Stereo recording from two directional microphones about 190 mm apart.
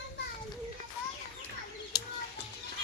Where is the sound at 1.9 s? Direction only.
20° left (ahead or behind).